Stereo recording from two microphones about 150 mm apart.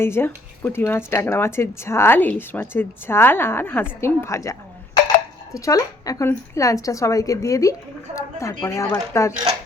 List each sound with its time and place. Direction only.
0.0 s a woman's voice: 15° left (ahead or behind)